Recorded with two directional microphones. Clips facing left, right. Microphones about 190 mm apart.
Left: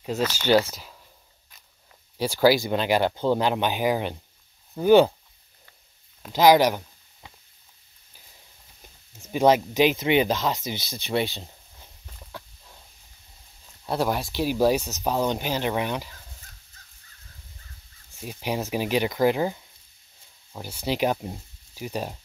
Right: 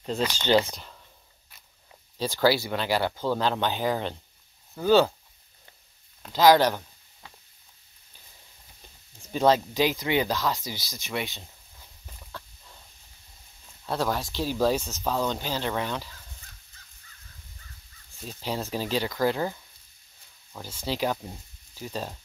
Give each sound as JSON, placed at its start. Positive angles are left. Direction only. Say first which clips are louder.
{"t": 0.7, "sound": "speech", "louder": "even", "side_deg": 5}
{"t": 2.1, "sound": "speech", "louder": "left 4 dB", "side_deg": 10}
{"t": 6.3, "sound": "speech", "louder": "left 2 dB", "side_deg": 15}
{"t": 9.2, "sound": "speech", "louder": "left 3 dB", "side_deg": 15}
{"t": 11.8, "sound": "a sound", "louder": "left 1 dB", "side_deg": 15}
{"t": 13.8, "sound": "speech", "louder": "left 3 dB", "side_deg": 15}
{"t": 18.2, "sound": "speech", "louder": "left 3 dB", "side_deg": 15}